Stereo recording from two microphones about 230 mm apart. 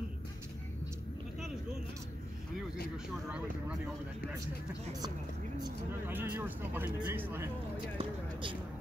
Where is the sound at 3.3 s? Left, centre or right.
Centre.